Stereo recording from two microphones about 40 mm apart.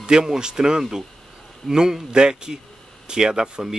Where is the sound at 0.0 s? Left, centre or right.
Centre.